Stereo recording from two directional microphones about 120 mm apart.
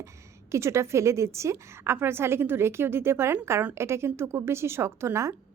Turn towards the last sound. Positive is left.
turn(degrees=-25)  # may be behind; listen again after turning